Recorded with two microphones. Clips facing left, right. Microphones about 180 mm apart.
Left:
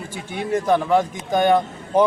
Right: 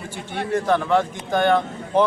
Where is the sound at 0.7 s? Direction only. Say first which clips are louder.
Left 2 dB; 10° left (ahead or behind).